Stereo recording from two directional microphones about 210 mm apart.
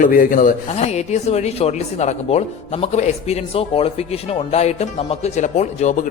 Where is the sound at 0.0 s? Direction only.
40° left (ahead or behind).